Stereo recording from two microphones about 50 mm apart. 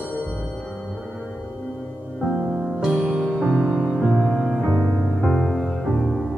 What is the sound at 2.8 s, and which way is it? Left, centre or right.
Music, centre.